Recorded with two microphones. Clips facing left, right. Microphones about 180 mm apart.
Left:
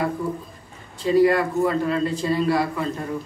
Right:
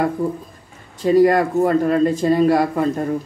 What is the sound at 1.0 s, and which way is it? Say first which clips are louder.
Speech: right 4 dB; 45° right (ahead or behind).